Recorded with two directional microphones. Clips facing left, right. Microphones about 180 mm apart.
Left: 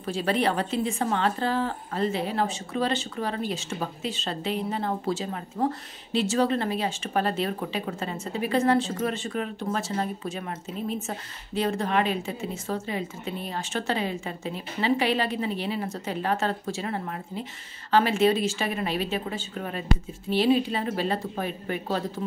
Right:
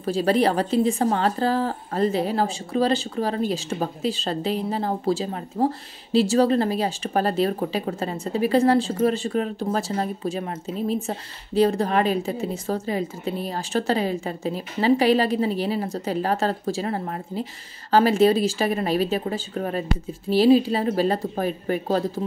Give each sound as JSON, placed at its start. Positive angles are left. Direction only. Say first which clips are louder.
{"t": 0.0, "sound": "a woman's voice", "louder": "right 5 dB", "side_deg": -40}